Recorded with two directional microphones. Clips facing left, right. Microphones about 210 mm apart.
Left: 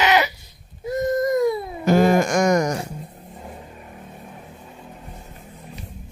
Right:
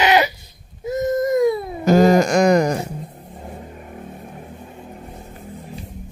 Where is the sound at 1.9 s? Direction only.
40° right (ahead or behind).